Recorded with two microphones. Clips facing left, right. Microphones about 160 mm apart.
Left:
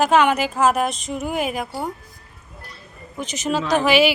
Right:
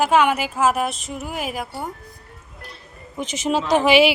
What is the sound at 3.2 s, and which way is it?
Speech, 25° right (ahead or behind).